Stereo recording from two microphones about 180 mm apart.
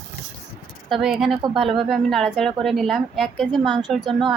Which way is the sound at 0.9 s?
Centre (ahead or behind).